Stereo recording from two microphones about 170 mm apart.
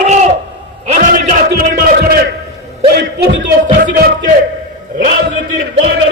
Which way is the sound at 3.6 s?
60° right (ahead or behind).